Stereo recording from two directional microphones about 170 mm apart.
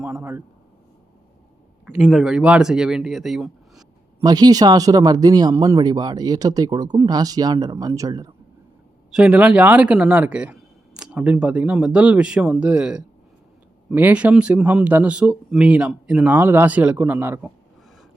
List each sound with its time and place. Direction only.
0.0 s a man's voice: 15° right (ahead or behind)
2.0 s speech: centre (ahead or behind)
4.2 s speech: 20° right (ahead or behind)
9.1 s speech: 5° right (ahead or behind)